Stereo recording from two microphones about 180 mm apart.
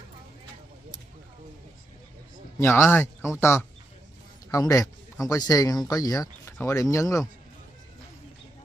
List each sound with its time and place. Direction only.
2.6 s a man's voice: 15° left (ahead or behind)